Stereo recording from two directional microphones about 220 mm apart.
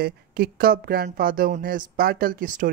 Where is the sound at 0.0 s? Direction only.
45° right (ahead or behind).